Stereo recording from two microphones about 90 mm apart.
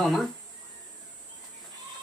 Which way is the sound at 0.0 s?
Centre (ahead or behind).